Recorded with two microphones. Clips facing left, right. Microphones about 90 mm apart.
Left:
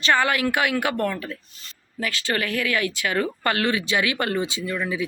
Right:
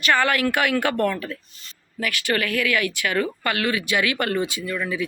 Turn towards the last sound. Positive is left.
turn(degrees=15)  # may be behind; listen again after turning